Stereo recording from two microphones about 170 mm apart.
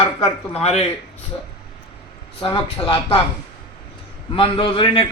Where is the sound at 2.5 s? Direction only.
35° left (ahead or behind).